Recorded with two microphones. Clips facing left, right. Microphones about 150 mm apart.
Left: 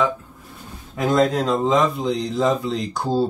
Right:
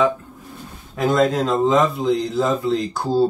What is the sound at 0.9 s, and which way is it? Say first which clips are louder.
A man's voice: right 1 dB; centre (ahead or behind).